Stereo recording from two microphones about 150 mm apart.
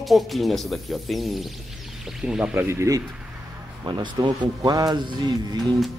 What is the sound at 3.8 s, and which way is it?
Speech, 30° right (ahead or behind).